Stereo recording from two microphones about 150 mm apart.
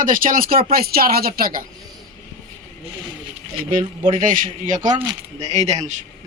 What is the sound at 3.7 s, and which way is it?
Speech, 65° right (ahead or behind).